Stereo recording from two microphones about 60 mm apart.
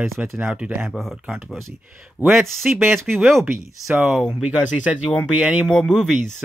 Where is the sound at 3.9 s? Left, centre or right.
Centre.